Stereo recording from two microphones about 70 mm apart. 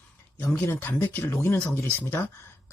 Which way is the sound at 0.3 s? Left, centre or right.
Left.